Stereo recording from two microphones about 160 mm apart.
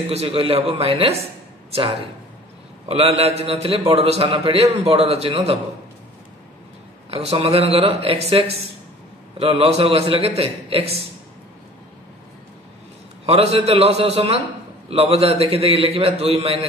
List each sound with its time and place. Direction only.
0.1 s a man's voice: 40° right (ahead or behind)
7.1 s a man's voice: 40° right (ahead or behind)
13.2 s a man's voice: 40° right (ahead or behind)